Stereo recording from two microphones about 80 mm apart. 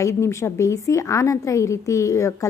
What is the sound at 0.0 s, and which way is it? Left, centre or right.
A woman's voice, left.